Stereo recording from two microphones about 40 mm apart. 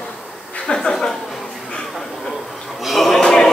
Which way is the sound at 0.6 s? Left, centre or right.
Centre.